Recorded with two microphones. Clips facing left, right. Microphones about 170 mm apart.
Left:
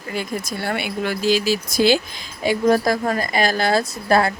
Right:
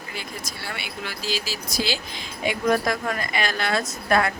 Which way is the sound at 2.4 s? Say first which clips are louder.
Left 5 dB; 35° left (ahead or behind).